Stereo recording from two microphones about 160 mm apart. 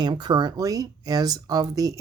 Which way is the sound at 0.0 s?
25° right (ahead or behind).